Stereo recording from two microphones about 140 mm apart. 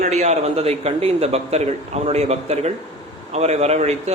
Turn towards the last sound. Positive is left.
turn(degrees=-50)  # may be behind; listen again after turning